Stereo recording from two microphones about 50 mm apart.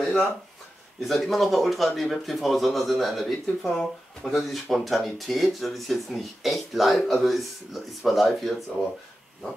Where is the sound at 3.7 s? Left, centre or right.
Centre.